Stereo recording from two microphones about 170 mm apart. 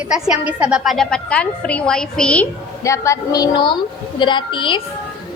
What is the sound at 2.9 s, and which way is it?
Female singing, 20° left (ahead or behind).